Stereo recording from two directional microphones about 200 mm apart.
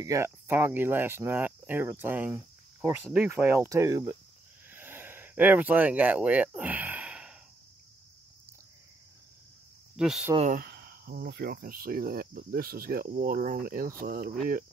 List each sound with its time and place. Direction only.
0.0 s speech: 15° right (ahead or behind)
4.6 s a sound: 10° right (ahead or behind)
9.9 s speech: 5° right (ahead or behind)
10.3 s speech: 35° right (ahead or behind)
10.6 s speech: 50° right (ahead or behind)